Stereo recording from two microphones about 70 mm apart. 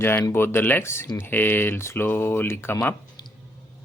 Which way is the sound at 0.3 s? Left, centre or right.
Left.